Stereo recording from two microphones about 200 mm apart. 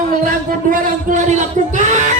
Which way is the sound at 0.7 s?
40° right (ahead or behind).